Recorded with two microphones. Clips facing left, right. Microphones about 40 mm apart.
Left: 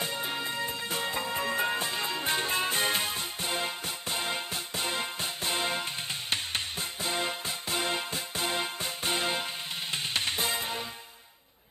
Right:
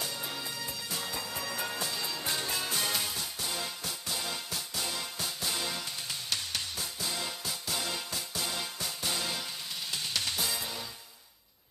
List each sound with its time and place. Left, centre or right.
0.0 s music: left